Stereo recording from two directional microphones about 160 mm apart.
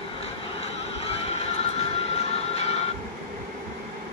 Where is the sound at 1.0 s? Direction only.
40° left (ahead or behind).